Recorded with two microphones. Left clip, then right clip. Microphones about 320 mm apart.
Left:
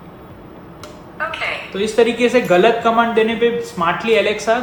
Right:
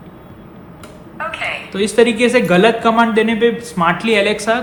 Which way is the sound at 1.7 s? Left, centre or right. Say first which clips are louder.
Right 3 dB; right.